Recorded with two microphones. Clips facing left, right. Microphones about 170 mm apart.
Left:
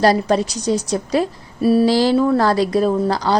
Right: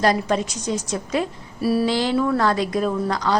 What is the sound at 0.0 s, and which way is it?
A woman's voice, 35° left (ahead or behind).